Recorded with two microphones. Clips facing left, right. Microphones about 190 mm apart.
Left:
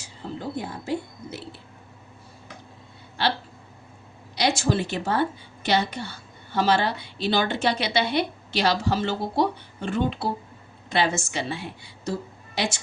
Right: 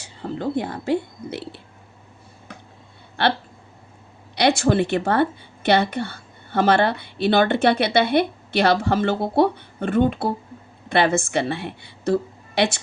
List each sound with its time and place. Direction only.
0.0 s speech: 65° right (ahead or behind)
3.2 s a woman's voice: 60° right (ahead or behind)
4.4 s a woman's voice: 60° right (ahead or behind)